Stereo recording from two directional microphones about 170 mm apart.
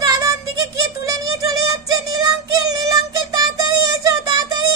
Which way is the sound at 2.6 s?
20° right (ahead or behind).